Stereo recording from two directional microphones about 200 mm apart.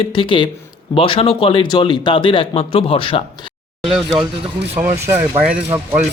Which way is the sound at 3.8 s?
Centre (ahead or behind).